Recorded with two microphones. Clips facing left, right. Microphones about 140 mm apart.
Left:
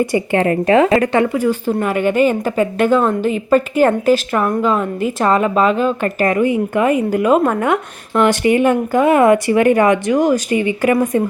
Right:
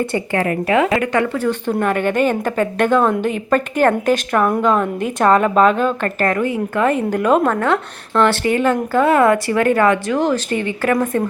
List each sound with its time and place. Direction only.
0.1 s a woman's voice: 15° left (ahead or behind)
0.4 s a woman's voice: 30° left (ahead or behind)
1.2 s a woman's voice: 10° left (ahead or behind)